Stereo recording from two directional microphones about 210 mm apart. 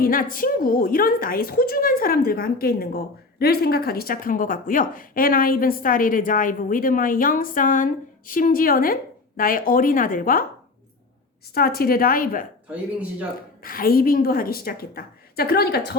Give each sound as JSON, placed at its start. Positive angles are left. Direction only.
{"t": 0.0, "sound": "a woman's voice", "side_deg": 40}
{"t": 11.5, "sound": "a woman's voice", "side_deg": 45}
{"t": 12.7, "sound": "speech", "side_deg": -5}
{"t": 13.6, "sound": "a woman's voice", "side_deg": 45}